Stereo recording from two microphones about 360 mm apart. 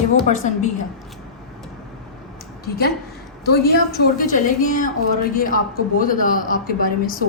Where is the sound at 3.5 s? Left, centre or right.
Left.